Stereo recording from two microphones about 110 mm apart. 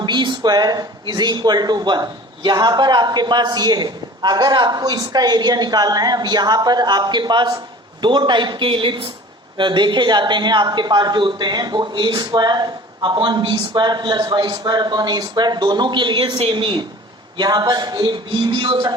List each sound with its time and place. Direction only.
0.0 s speech: 45° right (ahead or behind)